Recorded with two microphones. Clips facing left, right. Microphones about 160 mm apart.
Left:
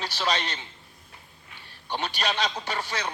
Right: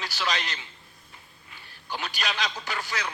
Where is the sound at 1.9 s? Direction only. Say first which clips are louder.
Left 3 dB; 30° left (ahead or behind).